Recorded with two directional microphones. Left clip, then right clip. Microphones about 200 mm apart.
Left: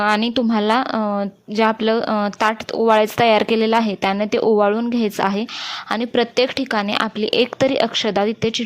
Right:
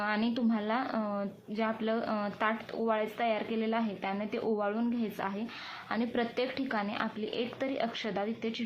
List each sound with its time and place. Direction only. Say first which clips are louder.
0.0 s a woman's voice: left 14 dB; 55° left (ahead or behind)